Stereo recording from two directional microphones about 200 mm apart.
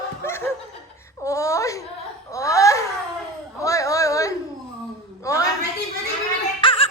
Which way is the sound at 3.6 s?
15° left (ahead or behind).